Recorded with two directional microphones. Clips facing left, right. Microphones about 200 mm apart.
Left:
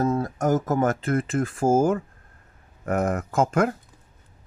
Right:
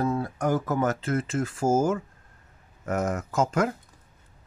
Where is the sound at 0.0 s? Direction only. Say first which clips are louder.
Left 3 dB; 45° left (ahead or behind).